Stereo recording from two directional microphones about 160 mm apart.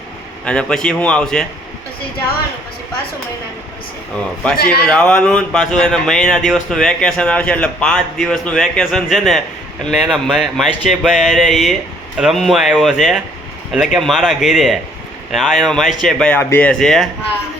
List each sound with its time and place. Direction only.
0.4 s speech: 5° left (ahead or behind)
4.5 s a man's voice: 80° left
4.9 s speech: 5° left (ahead or behind)